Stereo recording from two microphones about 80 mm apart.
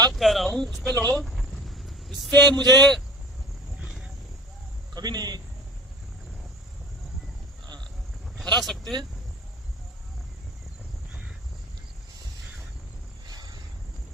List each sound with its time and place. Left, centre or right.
0.1 s speech: centre
1.1 s cricket: centre
3.8 s wild animals: centre
4.9 s a man's voice: right
8.4 s speech: centre
8.8 s a man's voice: right
13.2 s a sound: right